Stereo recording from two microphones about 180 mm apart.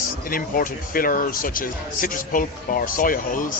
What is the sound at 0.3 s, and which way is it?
Speech, 50° left (ahead or behind).